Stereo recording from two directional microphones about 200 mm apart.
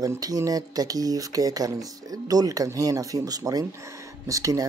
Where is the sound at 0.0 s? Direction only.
15° right (ahead or behind).